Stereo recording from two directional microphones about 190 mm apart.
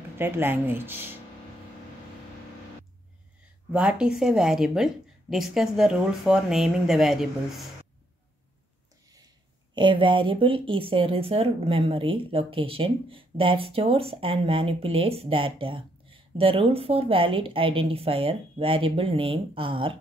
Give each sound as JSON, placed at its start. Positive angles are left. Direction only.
{"t": 0.2, "sound": "speech", "side_deg": -10}
{"t": 3.7, "sound": "a woman's voice", "side_deg": -5}
{"t": 9.8, "sound": "speech", "side_deg": -25}